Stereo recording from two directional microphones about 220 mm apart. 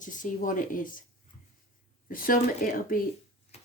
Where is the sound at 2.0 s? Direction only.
40° left (ahead or behind).